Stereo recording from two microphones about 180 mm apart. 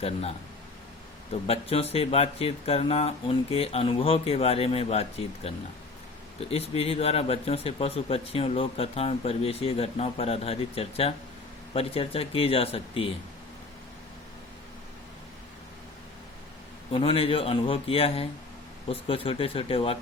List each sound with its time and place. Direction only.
0.0 s speech: 35° left (ahead or behind)
16.9 s speech: 30° left (ahead or behind)